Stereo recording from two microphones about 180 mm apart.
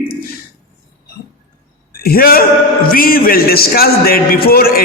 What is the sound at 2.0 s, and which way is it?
A man's voice, 55° left (ahead or behind).